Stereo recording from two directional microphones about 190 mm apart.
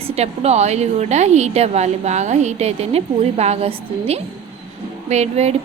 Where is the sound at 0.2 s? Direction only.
35° right (ahead or behind).